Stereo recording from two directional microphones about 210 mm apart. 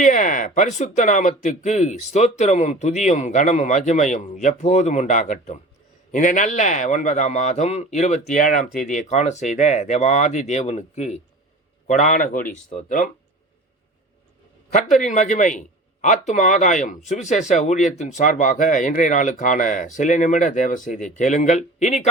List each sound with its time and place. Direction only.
0.0 s speech: 35° left (ahead or behind)
14.8 s speech: 35° left (ahead or behind)